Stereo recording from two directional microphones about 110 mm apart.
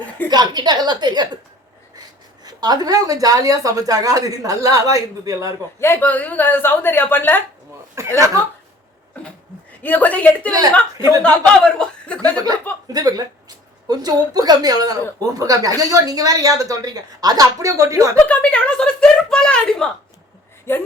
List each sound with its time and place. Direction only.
0.3 s a woman's voice: 40° right (ahead or behind)
2.4 s a woman's voice: 35° right (ahead or behind)
5.8 s a woman's voice: 20° left (ahead or behind)
8.0 s speech: 25° right (ahead or behind)
9.8 s speech: 15° left (ahead or behind)
10.9 s a woman's voice: 30° right (ahead or behind)
11.2 s speech: 10° left (ahead or behind)
12.9 s a woman's voice: 35° right (ahead or behind)
18.3 s speech: 10° left (ahead or behind)
20.7 s a woman's voice: 20° left (ahead or behind)